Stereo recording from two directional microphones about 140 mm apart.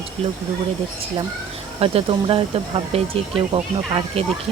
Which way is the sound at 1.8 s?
40° right (ahead or behind).